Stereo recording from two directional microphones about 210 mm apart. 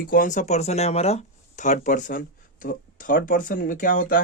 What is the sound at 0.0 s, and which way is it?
Speech, 40° left (ahead or behind).